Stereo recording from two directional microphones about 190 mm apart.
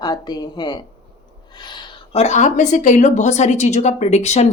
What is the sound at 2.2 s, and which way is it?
A woman's voice, 40° left (ahead or behind).